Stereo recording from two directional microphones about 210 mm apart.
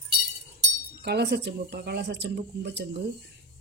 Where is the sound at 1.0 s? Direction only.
50° right (ahead or behind).